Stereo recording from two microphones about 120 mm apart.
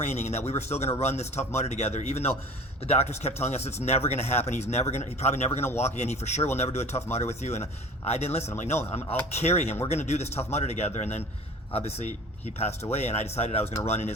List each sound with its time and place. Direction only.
0.0 s a man's voice: 65° left (ahead or behind)
11.7 s speech: 60° left (ahead or behind)